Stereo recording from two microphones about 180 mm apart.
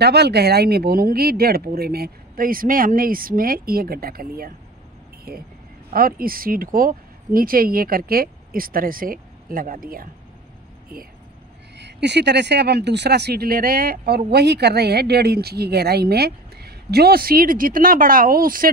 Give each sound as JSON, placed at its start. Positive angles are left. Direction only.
{"t": 0.0, "sound": "speech", "side_deg": -65}
{"t": 11.7, "sound": "speech", "side_deg": -70}